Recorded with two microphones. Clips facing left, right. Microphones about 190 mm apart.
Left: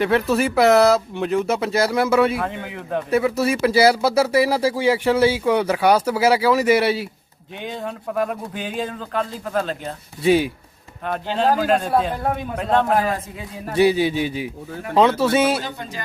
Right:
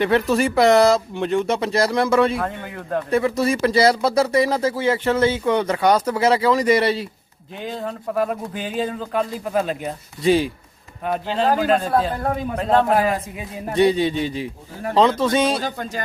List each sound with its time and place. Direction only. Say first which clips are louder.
0.0 s speech: right 1 dB; centre (ahead or behind)
10.2 s speech: left 1 dB; 5° left (ahead or behind)
15.6 s music: right 4 dB; 45° right (ahead or behind)